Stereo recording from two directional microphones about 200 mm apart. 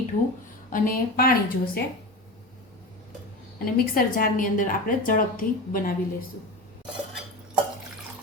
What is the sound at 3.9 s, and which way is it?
A woman's voice, 45° left (ahead or behind).